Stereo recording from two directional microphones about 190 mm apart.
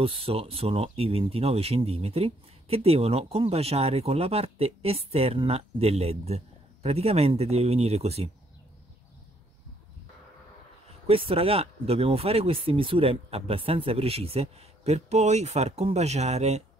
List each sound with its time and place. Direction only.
0.0 s speech: 30° right (ahead or behind)
11.1 s speech: 30° right (ahead or behind)